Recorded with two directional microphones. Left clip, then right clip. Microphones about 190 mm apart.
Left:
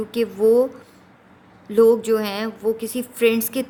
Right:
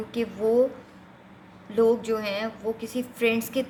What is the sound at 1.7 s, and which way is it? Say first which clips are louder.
Speech: left 7 dB; 50° left (ahead or behind).